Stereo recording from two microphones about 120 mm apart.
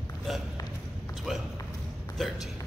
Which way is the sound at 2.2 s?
Centre (ahead or behind).